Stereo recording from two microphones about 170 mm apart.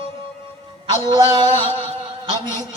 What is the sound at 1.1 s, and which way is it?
Music, 30° right (ahead or behind).